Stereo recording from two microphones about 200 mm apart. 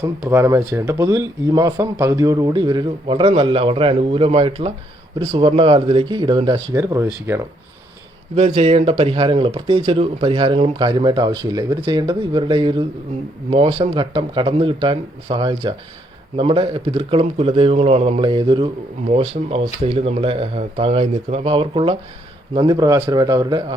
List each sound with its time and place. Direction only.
0.0 s speech: 15° right (ahead or behind)
8.4 s speech: 30° right (ahead or behind)